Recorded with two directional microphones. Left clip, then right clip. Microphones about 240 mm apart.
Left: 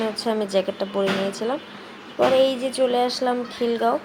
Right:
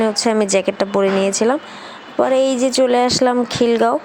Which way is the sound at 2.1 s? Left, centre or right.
Right.